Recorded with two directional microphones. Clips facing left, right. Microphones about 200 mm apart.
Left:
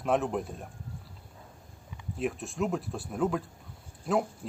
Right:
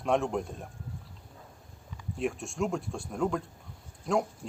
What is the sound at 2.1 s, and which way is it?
Speech, centre (ahead or behind).